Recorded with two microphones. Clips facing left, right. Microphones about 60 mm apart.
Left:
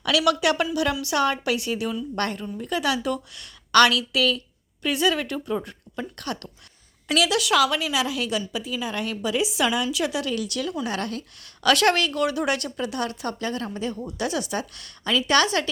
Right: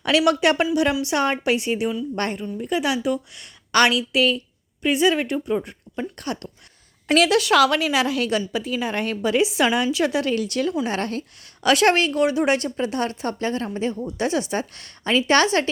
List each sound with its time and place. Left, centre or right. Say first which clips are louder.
0.0 s a woman's voice: right 3 dB; right
7.1 s a woman's voice: right 4 dB; right
7.6 s a woman's voice: right 4 dB; right
11.6 s a woman's voice: right 2 dB; right